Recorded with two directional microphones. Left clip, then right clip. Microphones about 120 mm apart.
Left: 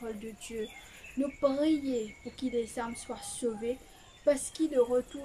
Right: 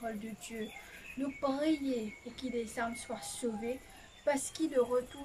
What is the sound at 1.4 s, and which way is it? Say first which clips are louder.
Speech: left 4 dB; 25° left (ahead or behind).